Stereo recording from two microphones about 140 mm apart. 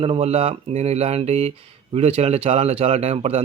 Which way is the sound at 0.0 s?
45° right (ahead or behind).